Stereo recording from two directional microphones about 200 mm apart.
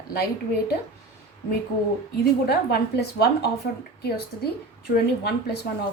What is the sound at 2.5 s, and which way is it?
Speech, 55° left (ahead or behind).